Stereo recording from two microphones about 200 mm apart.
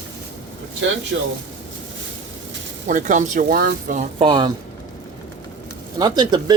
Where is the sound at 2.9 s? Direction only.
40° right (ahead or behind).